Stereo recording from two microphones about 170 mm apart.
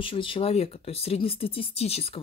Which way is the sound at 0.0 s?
30° left (ahead or behind).